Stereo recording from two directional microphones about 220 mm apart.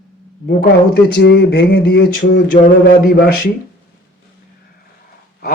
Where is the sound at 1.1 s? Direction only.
50° left (ahead or behind).